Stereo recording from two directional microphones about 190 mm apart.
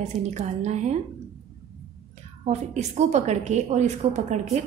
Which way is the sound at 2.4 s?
35° right (ahead or behind).